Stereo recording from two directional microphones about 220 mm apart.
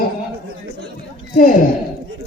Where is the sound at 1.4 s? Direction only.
40° left (ahead or behind).